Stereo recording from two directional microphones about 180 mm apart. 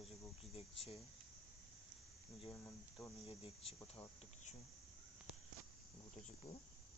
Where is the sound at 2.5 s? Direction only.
15° left (ahead or behind).